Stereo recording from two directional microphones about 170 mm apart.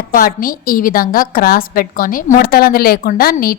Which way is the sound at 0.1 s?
55° left (ahead or behind).